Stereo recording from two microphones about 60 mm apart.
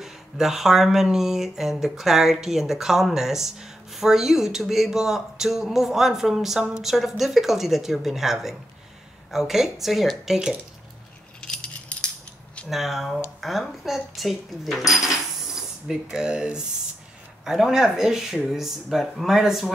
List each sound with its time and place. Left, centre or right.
0.0 s speech: centre
11.4 s keys jangling: centre
12.6 s speech: centre